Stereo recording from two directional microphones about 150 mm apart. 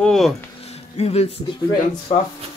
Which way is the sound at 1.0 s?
40° left (ahead or behind).